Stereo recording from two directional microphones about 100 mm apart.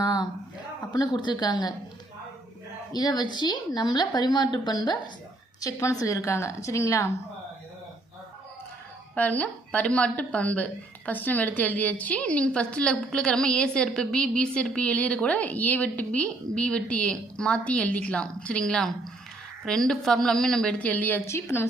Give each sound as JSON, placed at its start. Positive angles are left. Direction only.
{"t": 0.0, "sound": "a sound", "side_deg": 45}
{"t": 0.9, "sound": "a woman's voice", "side_deg": 45}
{"t": 2.9, "sound": "a woman's voice", "side_deg": 40}
{"t": 5.5, "sound": "a woman's voice", "side_deg": 35}
{"t": 9.1, "sound": "a woman's voice", "side_deg": 15}